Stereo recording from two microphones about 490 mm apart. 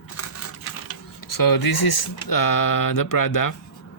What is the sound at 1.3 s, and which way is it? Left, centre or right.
Speech, left.